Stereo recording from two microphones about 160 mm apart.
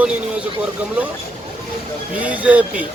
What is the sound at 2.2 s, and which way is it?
Speech, 10° right (ahead or behind).